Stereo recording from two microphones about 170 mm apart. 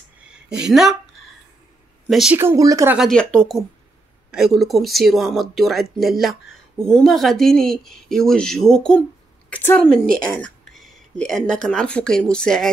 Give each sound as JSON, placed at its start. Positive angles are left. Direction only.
{"t": 0.3, "sound": "speech", "side_deg": -5}
{"t": 2.0, "sound": "a woman's voice", "side_deg": 0}
{"t": 2.3, "sound": "speech", "side_deg": -15}
{"t": 3.0, "sound": "a woman's voice", "side_deg": 5}